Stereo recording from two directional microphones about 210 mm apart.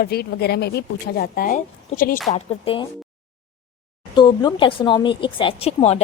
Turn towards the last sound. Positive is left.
turn(degrees=30)  # may be behind; listen again after turning